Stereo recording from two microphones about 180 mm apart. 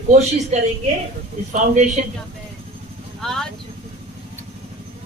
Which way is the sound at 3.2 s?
5° left (ahead or behind).